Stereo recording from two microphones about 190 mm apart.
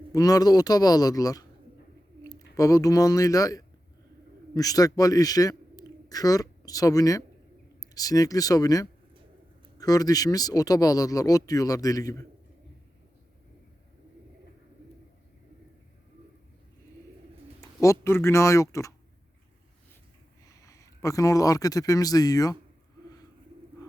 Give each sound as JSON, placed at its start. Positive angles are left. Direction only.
{"t": 0.1, "sound": "a man's voice", "side_deg": 20}
{"t": 17.6, "sound": "a sound", "side_deg": 15}
{"t": 18.0, "sound": "speech", "side_deg": 15}
{"t": 20.5, "sound": "speech", "side_deg": 15}